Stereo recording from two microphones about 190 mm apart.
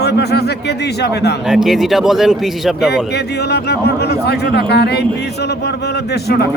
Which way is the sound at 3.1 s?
60° left (ahead or behind).